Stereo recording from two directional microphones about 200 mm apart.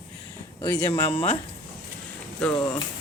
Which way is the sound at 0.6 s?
15° left (ahead or behind).